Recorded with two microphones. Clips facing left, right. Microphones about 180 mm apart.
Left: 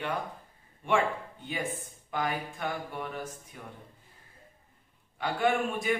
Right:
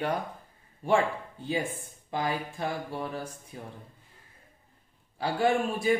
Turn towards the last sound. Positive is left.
turn(degrees=-35)  # may be behind; listen again after turning